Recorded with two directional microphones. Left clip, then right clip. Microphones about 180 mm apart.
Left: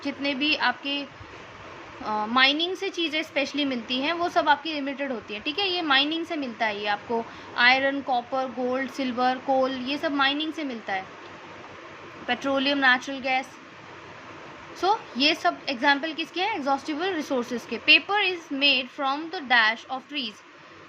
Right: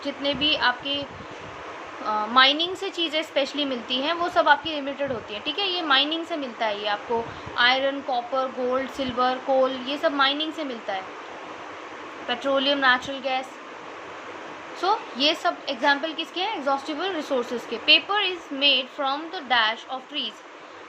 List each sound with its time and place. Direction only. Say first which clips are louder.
0.0 s a woman's voice: right 2 dB; 30° left (ahead or behind)
2.0 s a woman's voice: right 3 dB; 30° left (ahead or behind)
12.3 s a woman's voice: right 2 dB; 30° left (ahead or behind)
14.8 s a woman's voice: even; 30° left (ahead or behind)